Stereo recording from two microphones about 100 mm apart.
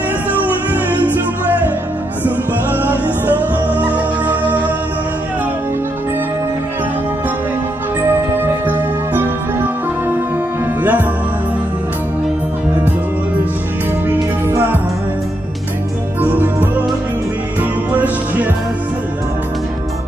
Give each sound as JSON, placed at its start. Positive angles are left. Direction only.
{"t": 0.3, "sound": "music", "side_deg": -15}
{"t": 8.1, "sound": "music", "side_deg": -20}
{"t": 10.8, "sound": "music", "side_deg": -15}
{"t": 14.0, "sound": "music", "side_deg": -20}
{"t": 16.2, "sound": "music", "side_deg": -20}